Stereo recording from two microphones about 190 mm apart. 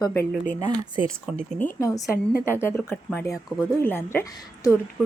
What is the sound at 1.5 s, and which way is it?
Speech, 10° left (ahead or behind).